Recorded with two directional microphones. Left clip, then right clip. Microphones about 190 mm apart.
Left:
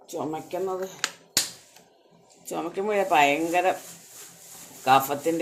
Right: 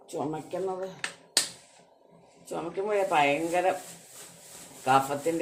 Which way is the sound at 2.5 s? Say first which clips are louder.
Left 3 dB; 40° left (ahead or behind).